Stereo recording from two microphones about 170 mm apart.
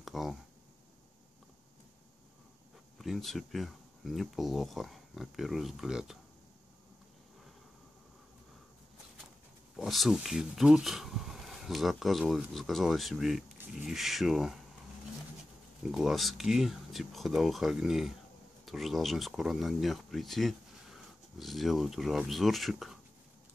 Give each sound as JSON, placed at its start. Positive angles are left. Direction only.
{"t": 0.0, "sound": "a sound", "side_deg": 0}
{"t": 3.0, "sound": "speech", "side_deg": 0}
{"t": 9.8, "sound": "speech", "side_deg": 0}
{"t": 15.9, "sound": "speech", "side_deg": 0}